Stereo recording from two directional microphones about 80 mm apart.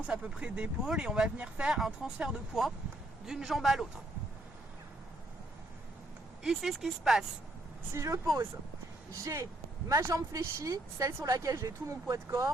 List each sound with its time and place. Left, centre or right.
0.1 s speech: centre
6.4 s speech: centre
7.9 s speech: right